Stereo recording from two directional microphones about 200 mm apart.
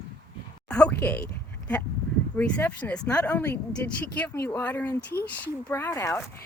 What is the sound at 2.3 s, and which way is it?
Speech, 10° left (ahead or behind).